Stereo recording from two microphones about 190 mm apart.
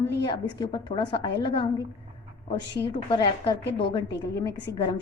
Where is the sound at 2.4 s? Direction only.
25° left (ahead or behind).